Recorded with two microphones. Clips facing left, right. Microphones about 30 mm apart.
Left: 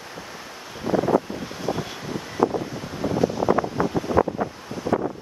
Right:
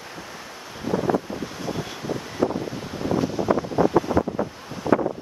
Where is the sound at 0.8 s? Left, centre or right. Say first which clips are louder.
Left 2 dB; centre.